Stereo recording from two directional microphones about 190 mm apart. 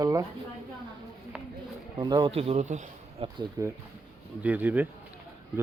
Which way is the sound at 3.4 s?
15° right (ahead or behind).